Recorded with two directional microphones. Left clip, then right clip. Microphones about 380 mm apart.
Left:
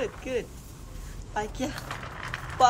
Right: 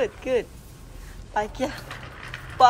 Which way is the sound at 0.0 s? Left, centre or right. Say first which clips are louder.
Right 7 dB; centre.